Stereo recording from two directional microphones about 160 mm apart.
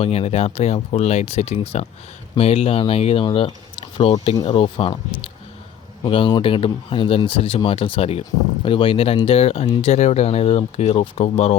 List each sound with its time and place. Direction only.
0.0 s speech: 40° left (ahead or behind)